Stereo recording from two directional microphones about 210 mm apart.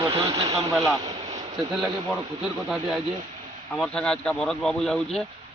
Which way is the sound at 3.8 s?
5° left (ahead or behind).